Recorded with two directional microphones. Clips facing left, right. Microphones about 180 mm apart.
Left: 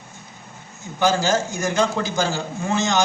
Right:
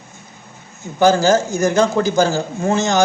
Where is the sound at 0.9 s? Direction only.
45° right (ahead or behind).